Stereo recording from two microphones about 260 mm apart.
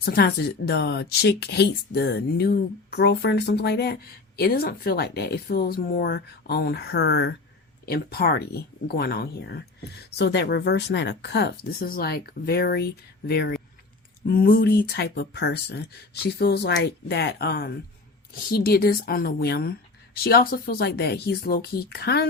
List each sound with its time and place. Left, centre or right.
0.0 s speech: left